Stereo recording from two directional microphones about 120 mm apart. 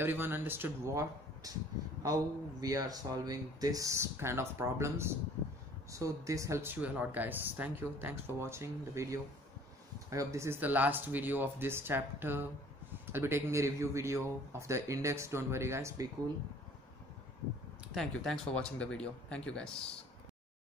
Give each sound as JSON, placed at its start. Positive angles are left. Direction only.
{"t": 0.0, "sound": "speech", "side_deg": -15}
{"t": 17.9, "sound": "speech", "side_deg": 5}